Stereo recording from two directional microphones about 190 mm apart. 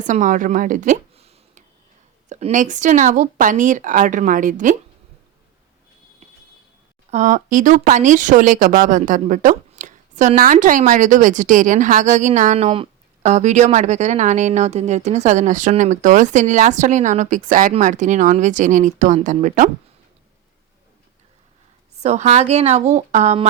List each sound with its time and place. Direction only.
0.0 s a woman's voice: 40° right (ahead or behind)
7.1 s a woman's voice: 40° right (ahead or behind)
22.0 s a woman's voice: 35° right (ahead or behind)